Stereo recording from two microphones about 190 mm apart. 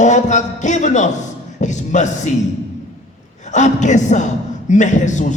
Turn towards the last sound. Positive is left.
turn(degrees=40)  # may be behind; listen again after turning